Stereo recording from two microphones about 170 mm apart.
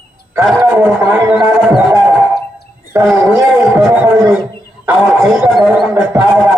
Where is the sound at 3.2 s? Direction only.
15° right (ahead or behind).